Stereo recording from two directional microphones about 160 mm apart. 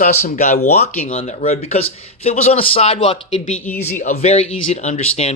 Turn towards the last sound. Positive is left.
turn(degrees=40)  # may be behind; listen again after turning